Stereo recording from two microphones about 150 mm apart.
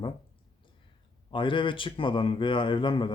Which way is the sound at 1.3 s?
35° left (ahead or behind).